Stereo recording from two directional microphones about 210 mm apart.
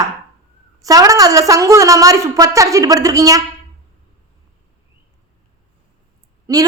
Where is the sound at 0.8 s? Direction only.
15° right (ahead or behind).